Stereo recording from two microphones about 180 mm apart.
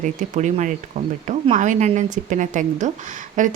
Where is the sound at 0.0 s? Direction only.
45° right (ahead or behind).